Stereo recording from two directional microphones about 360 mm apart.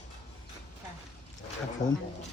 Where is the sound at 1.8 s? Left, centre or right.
Centre.